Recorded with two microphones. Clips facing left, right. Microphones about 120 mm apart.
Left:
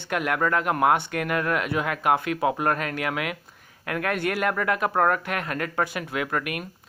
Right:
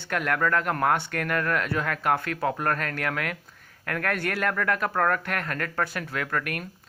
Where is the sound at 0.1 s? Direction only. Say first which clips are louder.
Left 1 dB; 10° left (ahead or behind).